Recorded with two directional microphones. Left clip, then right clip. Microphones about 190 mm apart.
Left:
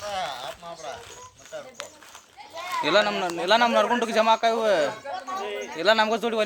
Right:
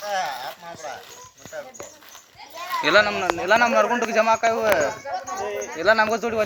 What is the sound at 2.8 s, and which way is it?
Speech, centre (ahead or behind).